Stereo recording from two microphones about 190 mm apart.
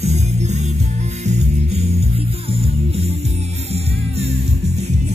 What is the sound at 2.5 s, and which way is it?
Music, 30° right (ahead or behind).